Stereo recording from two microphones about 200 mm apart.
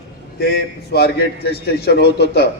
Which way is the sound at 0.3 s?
55° left (ahead or behind).